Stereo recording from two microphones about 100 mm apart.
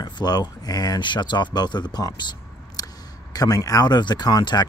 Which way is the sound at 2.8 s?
35° left (ahead or behind).